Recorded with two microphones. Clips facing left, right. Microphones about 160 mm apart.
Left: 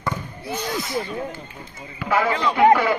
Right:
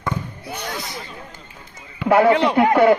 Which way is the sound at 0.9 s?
25° left (ahead or behind).